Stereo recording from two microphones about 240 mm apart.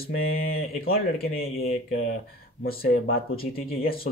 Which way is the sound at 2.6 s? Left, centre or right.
Left.